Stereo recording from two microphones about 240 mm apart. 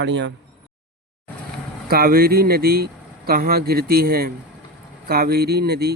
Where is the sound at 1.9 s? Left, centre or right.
Right.